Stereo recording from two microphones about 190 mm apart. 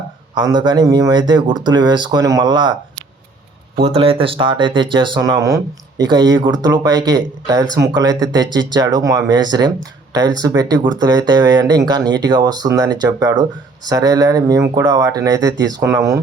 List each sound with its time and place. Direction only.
0.3 s speech: 20° right (ahead or behind)
3.8 s speech: 30° right (ahead or behind)